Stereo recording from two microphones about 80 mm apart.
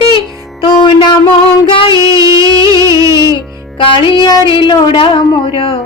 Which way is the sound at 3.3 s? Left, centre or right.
Left.